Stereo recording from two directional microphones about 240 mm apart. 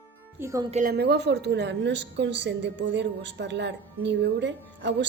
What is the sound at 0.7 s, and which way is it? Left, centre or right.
A woman's voice, right.